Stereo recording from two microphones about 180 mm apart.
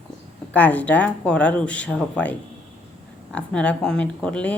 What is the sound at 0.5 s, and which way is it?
Speech, 10° left (ahead or behind).